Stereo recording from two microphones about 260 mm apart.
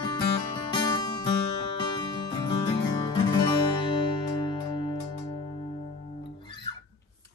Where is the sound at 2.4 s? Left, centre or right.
Centre.